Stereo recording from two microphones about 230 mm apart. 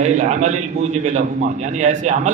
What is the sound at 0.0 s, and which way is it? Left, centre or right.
A man's voice, right.